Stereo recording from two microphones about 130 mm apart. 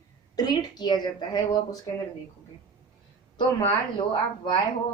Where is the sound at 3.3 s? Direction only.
40° left (ahead or behind).